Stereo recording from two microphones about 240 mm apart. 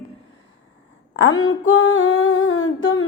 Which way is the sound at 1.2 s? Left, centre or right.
Left.